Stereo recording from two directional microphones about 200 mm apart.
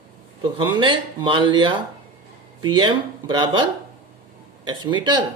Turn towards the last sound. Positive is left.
turn(degrees=-25)  # may be behind; listen again after turning